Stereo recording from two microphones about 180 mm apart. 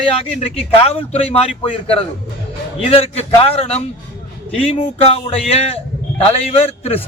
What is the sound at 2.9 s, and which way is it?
A man's voice, 30° left (ahead or behind).